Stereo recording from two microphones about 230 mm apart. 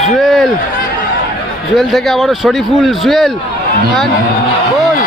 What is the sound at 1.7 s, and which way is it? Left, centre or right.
A man's voice, centre.